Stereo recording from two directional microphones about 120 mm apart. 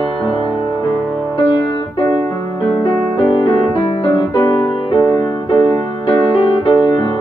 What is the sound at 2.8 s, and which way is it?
Music, 45° left (ahead or behind).